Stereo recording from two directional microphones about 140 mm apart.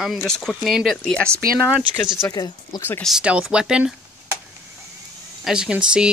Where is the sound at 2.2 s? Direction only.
25° left (ahead or behind).